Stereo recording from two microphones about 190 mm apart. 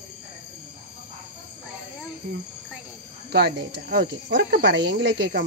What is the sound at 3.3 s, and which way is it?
Speech, 60° right (ahead or behind).